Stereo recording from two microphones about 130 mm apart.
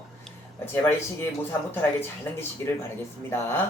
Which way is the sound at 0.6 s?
15° left (ahead or behind).